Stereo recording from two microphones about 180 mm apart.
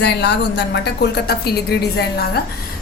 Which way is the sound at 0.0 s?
70° left (ahead or behind).